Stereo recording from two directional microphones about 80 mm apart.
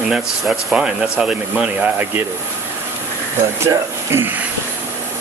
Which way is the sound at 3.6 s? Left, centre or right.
Right.